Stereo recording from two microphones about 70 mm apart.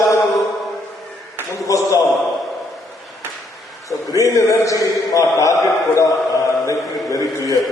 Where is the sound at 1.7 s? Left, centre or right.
Left.